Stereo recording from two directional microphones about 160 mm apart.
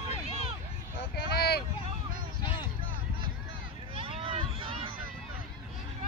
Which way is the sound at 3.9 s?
35° right (ahead or behind).